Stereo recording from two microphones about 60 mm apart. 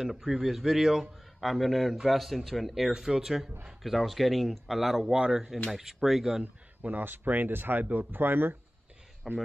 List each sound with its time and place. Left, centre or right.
0.0 s speech: centre
6.4 s speech: right
9.3 s speech: centre